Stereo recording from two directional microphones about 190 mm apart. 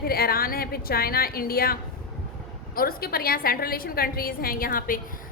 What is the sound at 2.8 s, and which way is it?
A woman's voice, 50° left (ahead or behind).